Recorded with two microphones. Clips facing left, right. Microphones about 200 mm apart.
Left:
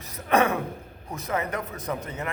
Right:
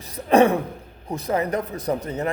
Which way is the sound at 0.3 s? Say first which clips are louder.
Right 6 dB; 30° right (ahead or behind).